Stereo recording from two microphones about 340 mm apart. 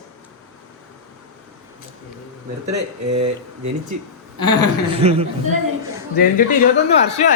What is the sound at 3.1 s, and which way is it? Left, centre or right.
Speech, centre.